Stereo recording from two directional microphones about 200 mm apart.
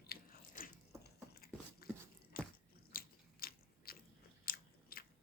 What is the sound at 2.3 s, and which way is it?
Biting, 50° left (ahead or behind).